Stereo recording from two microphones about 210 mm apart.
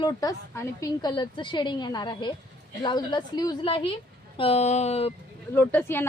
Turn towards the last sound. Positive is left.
turn(degrees=10)  # may be behind; listen again after turning